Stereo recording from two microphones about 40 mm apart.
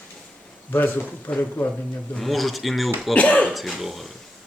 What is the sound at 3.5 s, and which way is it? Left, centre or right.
Speech, centre.